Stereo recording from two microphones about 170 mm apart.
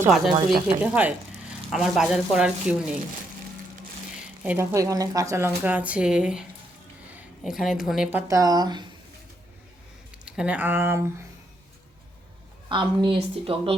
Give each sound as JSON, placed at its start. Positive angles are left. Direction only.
{"t": 0.3, "sound": "speech", "side_deg": -25}
{"t": 0.8, "sound": "speech", "side_deg": -10}
{"t": 4.4, "sound": "a woman's voice", "side_deg": -15}
{"t": 8.3, "sound": "speech", "side_deg": -20}
{"t": 10.2, "sound": "speech", "side_deg": -5}
{"t": 12.6, "sound": "a woman's voice", "side_deg": -30}